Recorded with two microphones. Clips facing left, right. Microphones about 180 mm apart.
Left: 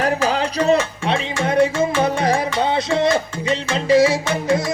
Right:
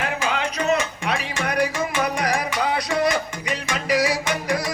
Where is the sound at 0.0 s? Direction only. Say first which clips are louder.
Left 6 dB; 35° left (ahead or behind).